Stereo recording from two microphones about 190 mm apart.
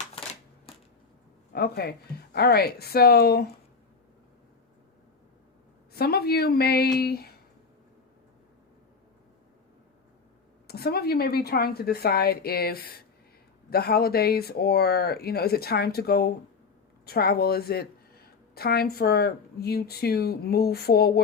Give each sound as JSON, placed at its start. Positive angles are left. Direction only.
{"t": 1.5, "sound": "speech", "side_deg": 55}
{"t": 5.9, "sound": "speech", "side_deg": 55}
{"t": 10.7, "sound": "speech", "side_deg": 55}